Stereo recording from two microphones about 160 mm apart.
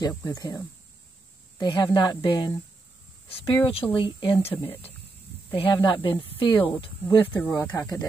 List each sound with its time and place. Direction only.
0.1 s speech: 15° left (ahead or behind)
1.6 s speech: 30° left (ahead or behind)
7.3 s speech: 20° left (ahead or behind)